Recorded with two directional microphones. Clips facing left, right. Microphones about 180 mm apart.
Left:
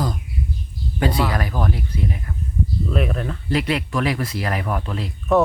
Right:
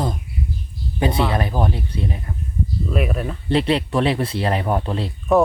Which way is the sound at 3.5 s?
30° right (ahead or behind).